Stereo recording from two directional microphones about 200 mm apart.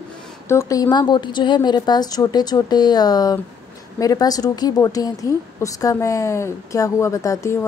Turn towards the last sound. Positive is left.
turn(degrees=15)  # may be behind; listen again after turning